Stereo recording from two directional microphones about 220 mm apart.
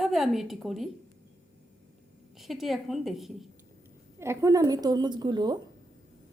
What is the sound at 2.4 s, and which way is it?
A woman's voice, centre (ahead or behind).